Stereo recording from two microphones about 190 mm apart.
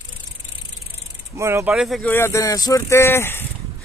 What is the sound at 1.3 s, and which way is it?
Speech, 15° right (ahead or behind).